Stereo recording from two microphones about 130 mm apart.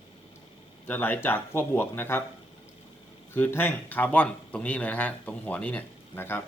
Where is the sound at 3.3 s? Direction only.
15° left (ahead or behind).